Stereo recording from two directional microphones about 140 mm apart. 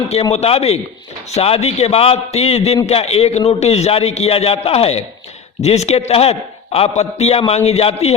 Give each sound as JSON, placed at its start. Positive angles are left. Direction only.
{"t": 0.1, "sound": "a man's voice", "side_deg": 50}